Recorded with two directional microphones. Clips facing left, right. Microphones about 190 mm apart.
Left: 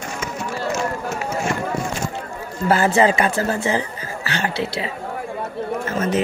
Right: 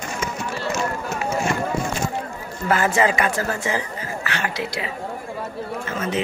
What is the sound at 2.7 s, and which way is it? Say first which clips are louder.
A man's voice: left 3 dB; 30° left (ahead or behind).